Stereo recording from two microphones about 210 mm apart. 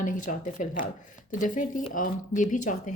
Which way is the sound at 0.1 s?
40° left (ahead or behind).